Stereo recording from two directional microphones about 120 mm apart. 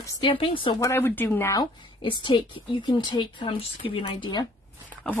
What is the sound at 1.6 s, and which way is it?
A woman's voice, 40° left (ahead or behind).